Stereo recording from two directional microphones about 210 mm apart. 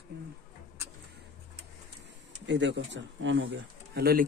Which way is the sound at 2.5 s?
60° right (ahead or behind).